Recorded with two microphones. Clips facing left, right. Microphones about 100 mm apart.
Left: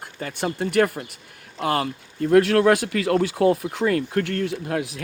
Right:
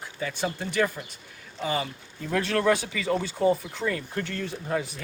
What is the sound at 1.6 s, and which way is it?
Speech, 65° left (ahead or behind).